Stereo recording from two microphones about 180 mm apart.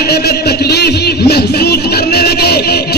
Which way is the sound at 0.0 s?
65° left (ahead or behind).